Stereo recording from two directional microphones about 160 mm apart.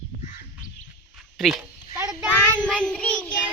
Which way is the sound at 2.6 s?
5° left (ahead or behind).